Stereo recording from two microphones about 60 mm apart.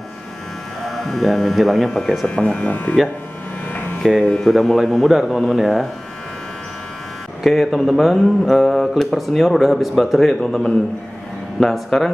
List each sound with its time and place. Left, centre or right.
0.8 s speech: centre
2.2 s speech: centre
3.7 s a sound: left
4.2 s a man's voice: centre
4.5 s speech: centre
7.4 s a man's voice: centre